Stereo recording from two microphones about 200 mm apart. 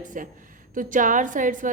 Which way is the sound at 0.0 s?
40° right (ahead or behind).